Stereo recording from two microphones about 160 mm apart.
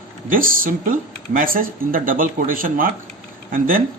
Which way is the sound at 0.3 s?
60° right (ahead or behind).